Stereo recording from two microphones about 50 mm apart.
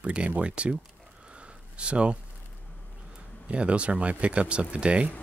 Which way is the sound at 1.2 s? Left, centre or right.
Right.